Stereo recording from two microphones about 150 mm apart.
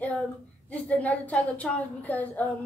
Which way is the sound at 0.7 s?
10° left (ahead or behind).